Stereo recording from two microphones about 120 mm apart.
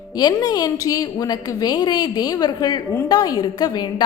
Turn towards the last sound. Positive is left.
turn(degrees=35)  # may be behind; listen again after turning